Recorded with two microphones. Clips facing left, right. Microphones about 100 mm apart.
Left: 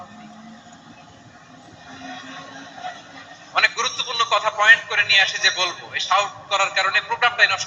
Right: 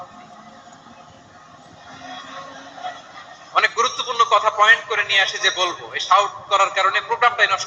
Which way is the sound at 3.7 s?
50° right (ahead or behind).